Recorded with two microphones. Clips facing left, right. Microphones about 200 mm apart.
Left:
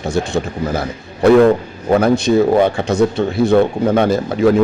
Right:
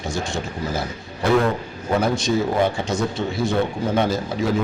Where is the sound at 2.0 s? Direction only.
60° left (ahead or behind).